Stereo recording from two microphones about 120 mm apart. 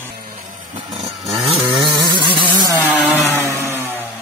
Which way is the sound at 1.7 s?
40° right (ahead or behind).